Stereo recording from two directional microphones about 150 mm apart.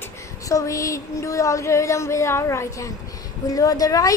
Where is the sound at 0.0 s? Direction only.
20° left (ahead or behind).